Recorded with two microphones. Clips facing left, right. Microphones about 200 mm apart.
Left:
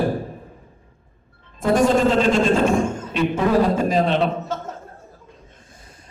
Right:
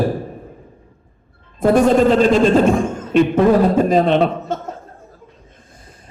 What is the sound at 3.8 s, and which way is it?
Speech, 55° right (ahead or behind).